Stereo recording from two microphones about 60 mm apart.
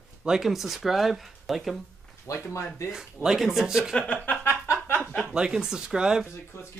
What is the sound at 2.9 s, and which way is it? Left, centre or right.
Speech, centre.